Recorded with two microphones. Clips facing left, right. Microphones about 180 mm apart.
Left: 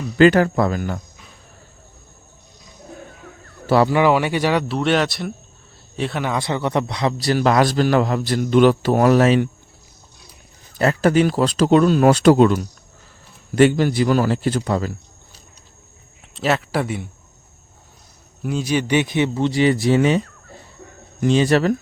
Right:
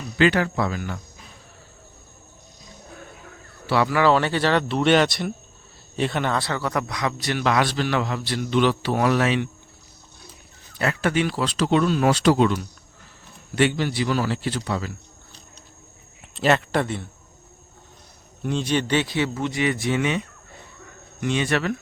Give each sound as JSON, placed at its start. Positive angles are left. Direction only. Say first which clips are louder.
{"t": 0.2, "sound": "speech", "louder": "left 7 dB", "side_deg": 45}
{"t": 3.8, "sound": "speech", "louder": "left 3 dB", "side_deg": 20}
{"t": 4.8, "sound": "speech", "louder": "right 1 dB", "side_deg": 0}
{"t": 6.3, "sound": "a man's voice", "louder": "left 4 dB", "side_deg": 20}
{"t": 10.8, "sound": "speech", "louder": "left 7 dB", "side_deg": 40}
{"t": 16.3, "sound": "speech", "louder": "even", "side_deg": 0}
{"t": 18.4, "sound": "a man's voice", "louder": "left 2 dB", "side_deg": 10}